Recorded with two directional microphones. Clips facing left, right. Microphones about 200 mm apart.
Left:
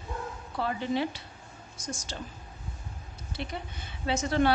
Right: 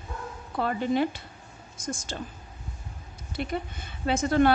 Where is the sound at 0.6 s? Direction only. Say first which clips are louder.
Right 4 dB; 50° right (ahead or behind).